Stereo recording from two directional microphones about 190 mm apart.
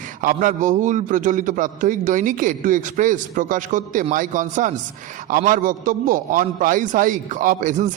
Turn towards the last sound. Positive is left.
turn(degrees=-40)  # may be behind; listen again after turning